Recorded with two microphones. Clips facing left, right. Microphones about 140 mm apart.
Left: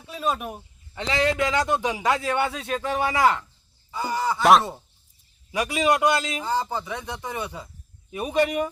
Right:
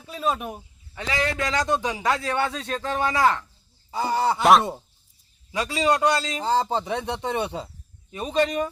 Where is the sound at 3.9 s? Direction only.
30° right (ahead or behind).